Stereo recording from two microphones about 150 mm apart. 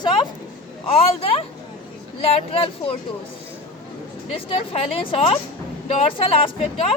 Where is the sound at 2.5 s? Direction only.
40° left (ahead or behind).